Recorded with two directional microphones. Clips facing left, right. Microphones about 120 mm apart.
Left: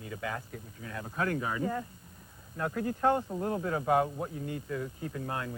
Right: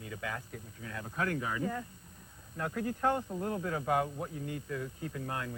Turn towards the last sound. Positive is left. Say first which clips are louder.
# left 2 dB
turn(degrees=30)  # may be behind; listen again after turning